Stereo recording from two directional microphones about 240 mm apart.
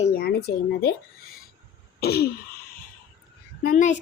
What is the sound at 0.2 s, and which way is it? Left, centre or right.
Speech, left.